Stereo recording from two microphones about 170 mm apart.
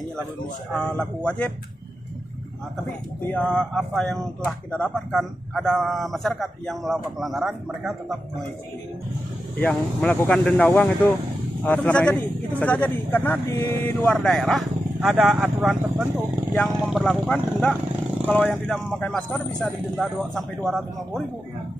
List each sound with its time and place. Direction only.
0.7 s speech: 5° left (ahead or behind)
3.3 s speech: 5° left (ahead or behind)
9.6 s a man's voice: 10° left (ahead or behind)
14.0 s speech: 5° left (ahead or behind)